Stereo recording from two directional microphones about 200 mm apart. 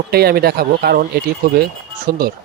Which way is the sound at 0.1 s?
50° right (ahead or behind).